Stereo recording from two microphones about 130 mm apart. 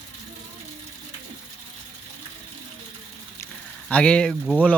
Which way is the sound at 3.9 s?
10° left (ahead or behind).